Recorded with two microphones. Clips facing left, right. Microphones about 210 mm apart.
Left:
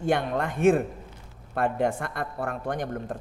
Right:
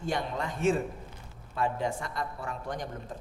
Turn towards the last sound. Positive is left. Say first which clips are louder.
# left 7 dB
turn(degrees=60)  # may be behind; listen again after turning